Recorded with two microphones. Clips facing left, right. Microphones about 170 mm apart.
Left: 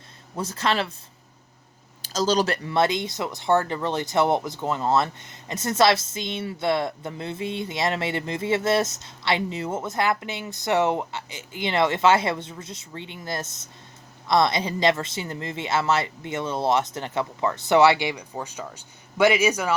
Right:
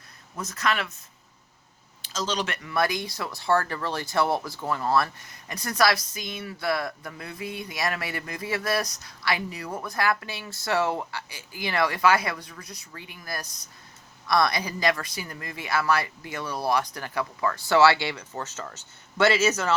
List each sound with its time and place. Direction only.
0.3 s speech: 30° left (ahead or behind)
2.0 s speech: 40° left (ahead or behind); by 19.7 s 10° left (ahead or behind)